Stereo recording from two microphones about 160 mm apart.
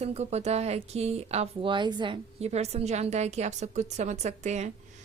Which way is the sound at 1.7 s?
30° right (ahead or behind).